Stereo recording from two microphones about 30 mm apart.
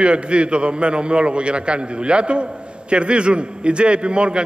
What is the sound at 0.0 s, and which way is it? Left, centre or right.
A man's voice, right.